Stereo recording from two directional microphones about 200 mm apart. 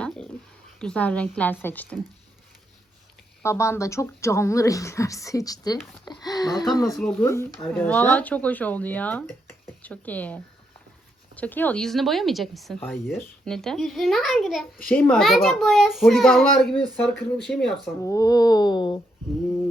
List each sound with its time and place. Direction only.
0.8 s a woman's voice: 5° left (ahead or behind)
3.4 s a woman's voice: 15° left (ahead or behind)
6.8 s a woman's voice: 5° left (ahead or behind)
18.0 s speech: 15° left (ahead or behind)